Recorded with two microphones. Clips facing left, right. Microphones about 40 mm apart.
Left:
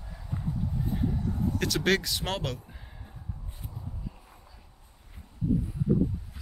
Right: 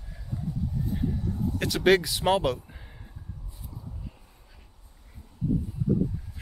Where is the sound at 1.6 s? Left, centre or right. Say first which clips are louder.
Right 6 dB; centre.